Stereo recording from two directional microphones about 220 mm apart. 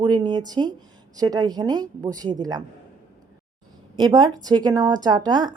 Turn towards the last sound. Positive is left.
turn(degrees=-20)  # may be behind; listen again after turning